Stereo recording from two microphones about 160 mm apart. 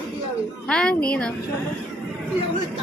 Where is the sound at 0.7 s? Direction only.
5° left (ahead or behind).